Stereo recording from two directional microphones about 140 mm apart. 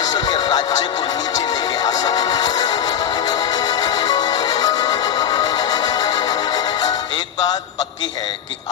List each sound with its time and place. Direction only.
0.3 s music: 30° left (ahead or behind)